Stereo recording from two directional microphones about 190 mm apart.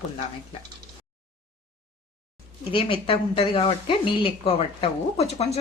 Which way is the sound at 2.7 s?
30° left (ahead or behind).